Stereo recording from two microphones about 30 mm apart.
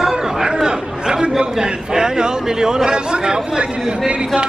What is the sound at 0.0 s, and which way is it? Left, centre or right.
Chatter, centre.